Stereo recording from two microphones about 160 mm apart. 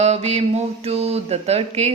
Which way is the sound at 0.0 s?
45° right (ahead or behind).